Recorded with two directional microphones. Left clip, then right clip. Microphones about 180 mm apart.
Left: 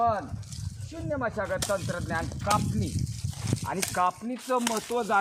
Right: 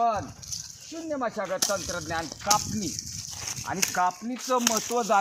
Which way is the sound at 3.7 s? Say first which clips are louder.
Right 1 dB; 55° left (ahead or behind).